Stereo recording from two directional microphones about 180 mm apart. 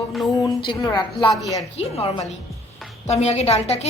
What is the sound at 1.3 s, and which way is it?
Music, centre (ahead or behind).